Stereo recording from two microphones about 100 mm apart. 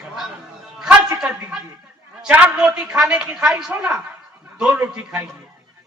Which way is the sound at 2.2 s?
10° right (ahead or behind).